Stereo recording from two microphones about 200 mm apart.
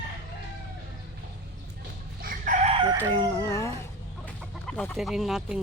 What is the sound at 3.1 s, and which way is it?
Cat, 15° left (ahead or behind).